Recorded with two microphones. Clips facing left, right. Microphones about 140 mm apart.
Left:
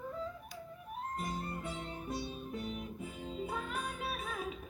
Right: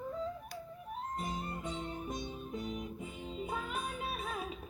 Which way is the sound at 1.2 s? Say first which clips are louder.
Even; 20° right (ahead or behind).